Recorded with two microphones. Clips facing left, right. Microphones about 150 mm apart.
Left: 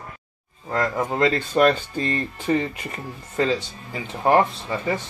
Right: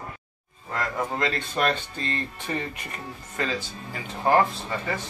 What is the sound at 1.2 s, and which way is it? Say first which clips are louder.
Speech: left 10 dB; 40° left (ahead or behind).